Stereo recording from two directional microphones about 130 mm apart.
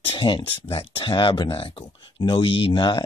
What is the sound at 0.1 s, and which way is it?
Speech, 40° left (ahead or behind).